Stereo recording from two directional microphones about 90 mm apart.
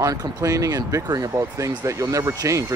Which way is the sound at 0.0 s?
40° right (ahead or behind).